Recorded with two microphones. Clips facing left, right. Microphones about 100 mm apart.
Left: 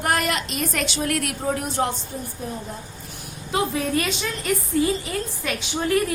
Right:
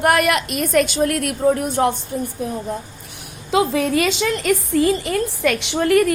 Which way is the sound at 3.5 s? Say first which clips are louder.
Right 6 dB; 90° right.